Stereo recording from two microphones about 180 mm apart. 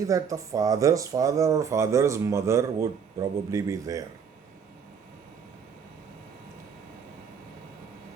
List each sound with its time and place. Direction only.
0.0 s speech: 20° right (ahead or behind)